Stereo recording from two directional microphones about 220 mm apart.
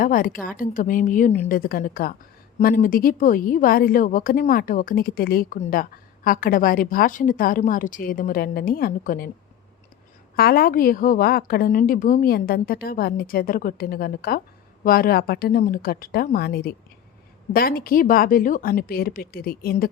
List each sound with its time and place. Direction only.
0.0 s a woman's voice: 40° left (ahead or behind)
10.3 s a woman's voice: 45° left (ahead or behind)